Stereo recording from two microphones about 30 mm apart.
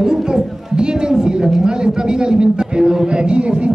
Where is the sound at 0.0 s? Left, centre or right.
Right.